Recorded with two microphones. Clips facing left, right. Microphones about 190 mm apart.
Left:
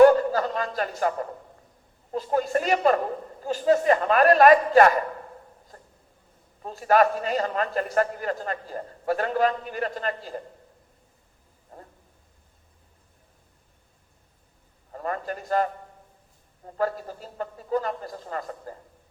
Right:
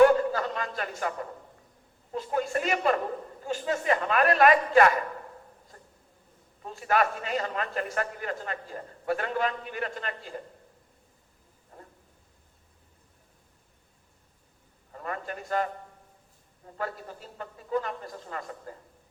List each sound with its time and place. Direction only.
0.0 s a sound: 40° left (ahead or behind)
2.1 s a man's voice: 40° left (ahead or behind)
5.7 s a sound: 40° left (ahead or behind)
6.6 s a man's voice: 40° left (ahead or behind)
14.9 s a man's voice: 40° left (ahead or behind)
16.7 s a man's voice: 40° left (ahead or behind)